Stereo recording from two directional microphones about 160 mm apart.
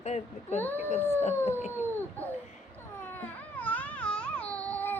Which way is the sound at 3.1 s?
10° left (ahead or behind).